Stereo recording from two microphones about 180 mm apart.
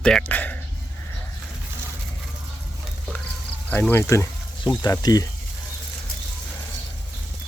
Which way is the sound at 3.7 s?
10° left (ahead or behind).